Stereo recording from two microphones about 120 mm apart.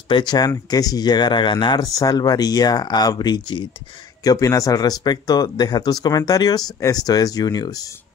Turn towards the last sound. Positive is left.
turn(degrees=30)  # may be behind; listen again after turning